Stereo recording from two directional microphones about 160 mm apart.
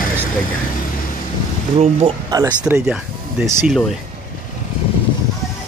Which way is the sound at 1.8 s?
40° right (ahead or behind).